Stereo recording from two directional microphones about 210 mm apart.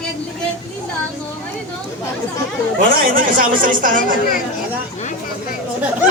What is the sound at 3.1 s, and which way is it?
A man's voice, 40° right (ahead or behind).